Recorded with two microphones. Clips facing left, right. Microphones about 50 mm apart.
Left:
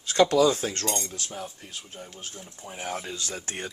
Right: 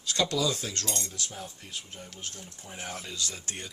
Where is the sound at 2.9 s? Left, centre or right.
Left.